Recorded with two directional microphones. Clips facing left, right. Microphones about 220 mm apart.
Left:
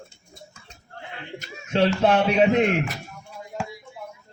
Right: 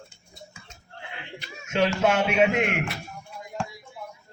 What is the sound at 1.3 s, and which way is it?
Speech, 40° left (ahead or behind).